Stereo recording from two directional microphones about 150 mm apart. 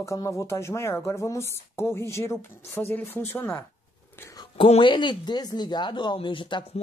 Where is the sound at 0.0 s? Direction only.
20° left (ahead or behind).